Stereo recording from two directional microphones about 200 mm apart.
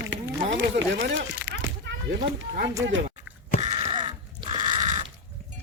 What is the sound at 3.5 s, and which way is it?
Crow, 30° right (ahead or behind).